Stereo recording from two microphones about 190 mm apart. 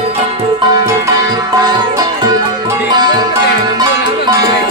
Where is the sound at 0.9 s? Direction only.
15° right (ahead or behind).